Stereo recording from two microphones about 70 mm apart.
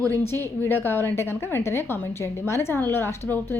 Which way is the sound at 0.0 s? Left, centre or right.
Left.